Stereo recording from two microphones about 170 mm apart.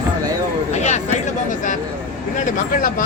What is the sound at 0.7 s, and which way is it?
Speech, 40° left (ahead or behind).